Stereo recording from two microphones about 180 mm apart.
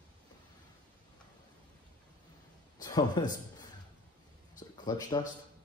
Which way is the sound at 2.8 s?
20° left (ahead or behind).